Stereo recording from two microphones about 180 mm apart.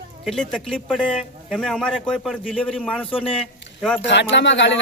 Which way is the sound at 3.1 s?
30° left (ahead or behind).